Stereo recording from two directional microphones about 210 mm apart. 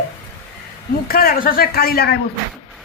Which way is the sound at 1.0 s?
45° left (ahead or behind).